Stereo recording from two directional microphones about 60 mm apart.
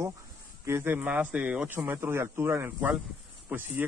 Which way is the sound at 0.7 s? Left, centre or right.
Right.